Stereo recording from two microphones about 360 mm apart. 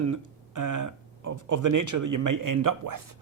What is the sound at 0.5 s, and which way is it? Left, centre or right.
Speech, right.